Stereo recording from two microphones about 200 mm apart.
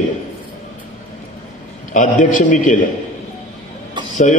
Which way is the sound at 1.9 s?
40° left (ahead or behind).